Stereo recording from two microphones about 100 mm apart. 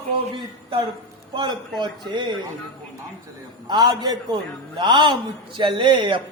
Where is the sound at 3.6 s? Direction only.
45° right (ahead or behind).